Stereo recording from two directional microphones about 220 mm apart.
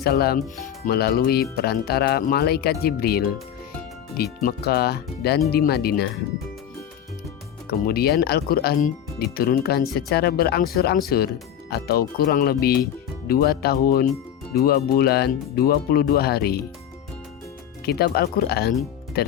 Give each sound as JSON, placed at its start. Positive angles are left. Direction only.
{"t": 0.0, "sound": "speech", "side_deg": 45}
{"t": 7.7, "sound": "speech", "side_deg": 45}
{"t": 17.8, "sound": "speech", "side_deg": 45}